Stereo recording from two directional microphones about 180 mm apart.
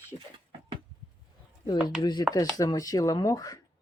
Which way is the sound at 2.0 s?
25° left (ahead or behind).